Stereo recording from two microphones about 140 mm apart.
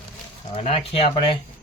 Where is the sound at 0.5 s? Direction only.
45° left (ahead or behind).